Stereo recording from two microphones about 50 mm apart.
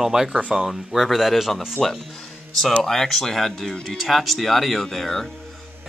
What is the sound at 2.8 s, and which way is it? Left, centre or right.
Speech, centre.